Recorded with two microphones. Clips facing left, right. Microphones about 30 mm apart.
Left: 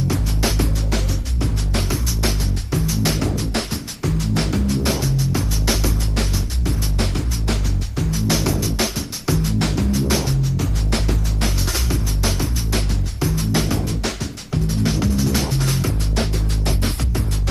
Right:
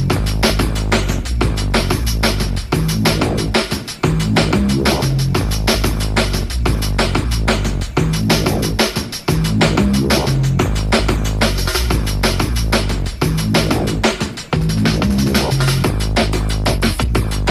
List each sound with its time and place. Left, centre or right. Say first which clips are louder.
0.1 s music: right 6 dB; right
3.2 s music: right 6 dB; right
6.1 s music: right 6 dB; right
8.3 s music: right 5 dB; right
9.5 s music: right 7 dB; right
10.4 s music: right 6 dB; right
11.7 s music: right 5 dB; right